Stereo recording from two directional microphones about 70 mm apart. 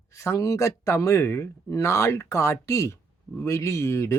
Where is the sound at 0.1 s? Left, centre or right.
Left.